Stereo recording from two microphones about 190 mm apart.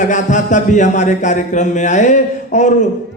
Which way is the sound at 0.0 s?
40° left (ahead or behind).